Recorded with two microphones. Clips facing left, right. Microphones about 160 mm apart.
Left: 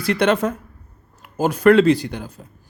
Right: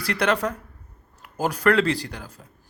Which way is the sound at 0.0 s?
25° left (ahead or behind).